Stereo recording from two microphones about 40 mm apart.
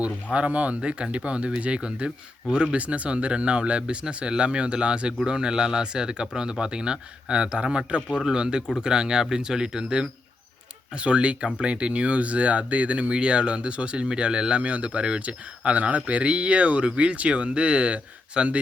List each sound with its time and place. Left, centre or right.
0.0 s speech: right
2.7 s speech: right; by 10.1 s centre
10.9 s speech: right